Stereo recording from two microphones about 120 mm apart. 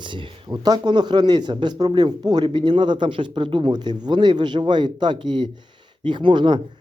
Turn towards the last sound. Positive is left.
turn(degrees=-40)  # may be behind; listen again after turning